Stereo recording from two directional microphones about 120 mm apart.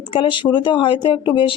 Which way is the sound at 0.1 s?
45° left (ahead or behind).